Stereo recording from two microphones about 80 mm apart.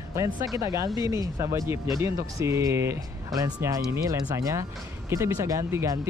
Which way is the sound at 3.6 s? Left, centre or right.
Right.